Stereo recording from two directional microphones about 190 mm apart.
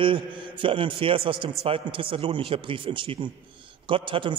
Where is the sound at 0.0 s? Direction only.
25° right (ahead or behind).